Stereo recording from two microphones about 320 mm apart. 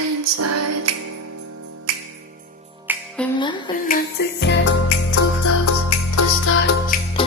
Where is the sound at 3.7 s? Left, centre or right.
Left.